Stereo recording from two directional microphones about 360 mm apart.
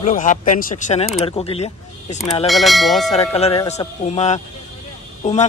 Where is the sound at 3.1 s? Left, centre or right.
Centre.